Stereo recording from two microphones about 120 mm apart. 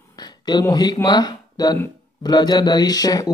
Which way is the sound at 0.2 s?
35° left (ahead or behind).